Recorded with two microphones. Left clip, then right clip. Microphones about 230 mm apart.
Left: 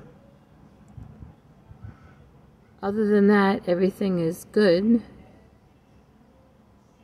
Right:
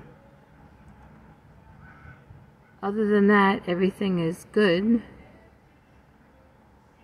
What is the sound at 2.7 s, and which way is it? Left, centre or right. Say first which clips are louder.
Speech: left 1 dB; centre.